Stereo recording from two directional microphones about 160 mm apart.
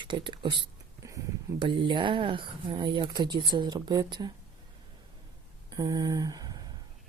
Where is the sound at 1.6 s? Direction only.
30° right (ahead or behind).